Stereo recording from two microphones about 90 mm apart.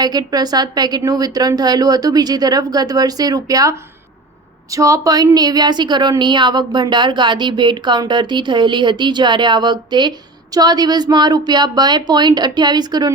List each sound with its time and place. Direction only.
0.0 s speech: 50° right (ahead or behind)